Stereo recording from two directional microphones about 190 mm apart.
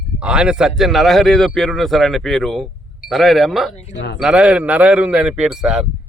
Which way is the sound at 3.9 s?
65° left (ahead or behind).